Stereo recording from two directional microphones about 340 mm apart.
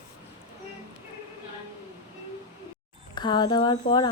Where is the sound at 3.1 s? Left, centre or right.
Centre.